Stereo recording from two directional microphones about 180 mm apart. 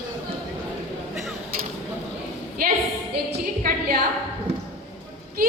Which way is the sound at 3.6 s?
55° right (ahead or behind).